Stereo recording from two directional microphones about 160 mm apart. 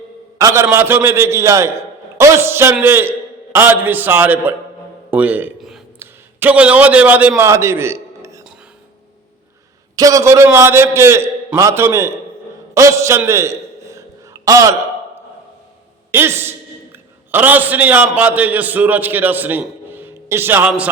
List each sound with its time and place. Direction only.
0.3 s a man's voice: 20° right (ahead or behind)
5.1 s a sound: 10° right (ahead or behind)
6.0 s a man's voice: 10° right (ahead or behind)
9.9 s a man's voice: 20° right (ahead or behind)
12.7 s a sound: 20° right (ahead or behind)
16.1 s a man's voice: 15° right (ahead or behind)